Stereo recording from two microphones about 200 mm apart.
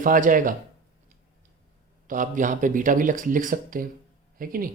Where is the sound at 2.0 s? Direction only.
40° right (ahead or behind).